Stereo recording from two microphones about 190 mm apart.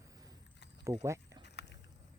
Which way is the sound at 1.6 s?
60° left (ahead or behind).